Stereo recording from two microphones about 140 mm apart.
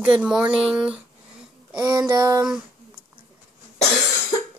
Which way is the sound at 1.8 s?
25° right (ahead or behind).